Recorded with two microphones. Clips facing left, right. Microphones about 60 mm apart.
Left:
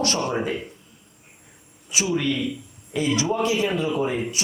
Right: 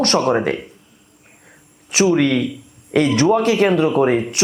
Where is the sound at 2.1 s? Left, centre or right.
Right.